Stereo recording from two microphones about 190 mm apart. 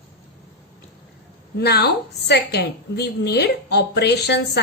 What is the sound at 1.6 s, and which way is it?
A woman's voice, 60° left (ahead or behind).